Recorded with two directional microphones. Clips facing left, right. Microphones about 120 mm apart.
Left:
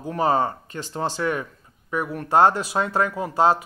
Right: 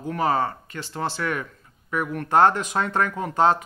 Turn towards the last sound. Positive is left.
turn(degrees=15)  # may be behind; listen again after turning